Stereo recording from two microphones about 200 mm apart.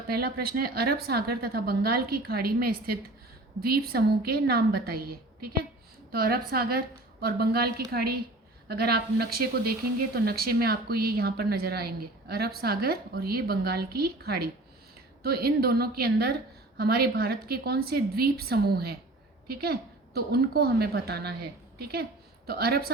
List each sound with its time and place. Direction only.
0.1 s a woman's voice: 50° right (ahead or behind)
22.4 s a woman's voice: 50° right (ahead or behind)